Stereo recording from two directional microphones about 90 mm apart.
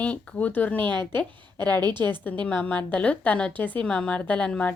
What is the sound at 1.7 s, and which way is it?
Speech, 55° right (ahead or behind).